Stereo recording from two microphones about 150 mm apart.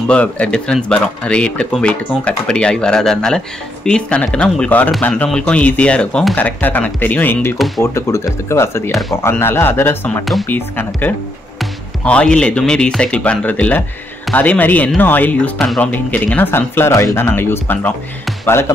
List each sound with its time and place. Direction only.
0.1 s speech: 10° left (ahead or behind)
7.5 s speech: centre (ahead or behind)
7.8 s speech: 20° left (ahead or behind)